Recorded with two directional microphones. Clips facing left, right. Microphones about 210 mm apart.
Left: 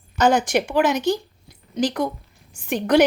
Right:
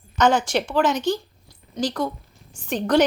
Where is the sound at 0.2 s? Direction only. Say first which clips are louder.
Left 1 dB; 15° left (ahead or behind).